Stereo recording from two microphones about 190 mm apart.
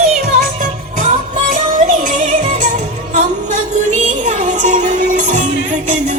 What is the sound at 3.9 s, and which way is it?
Music, 35° right (ahead or behind).